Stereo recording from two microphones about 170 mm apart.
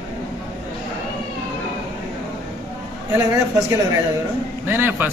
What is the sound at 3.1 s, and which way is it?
Speech, 20° right (ahead or behind).